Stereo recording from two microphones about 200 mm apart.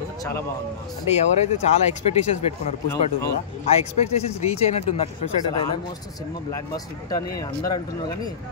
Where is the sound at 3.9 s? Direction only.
30° left (ahead or behind).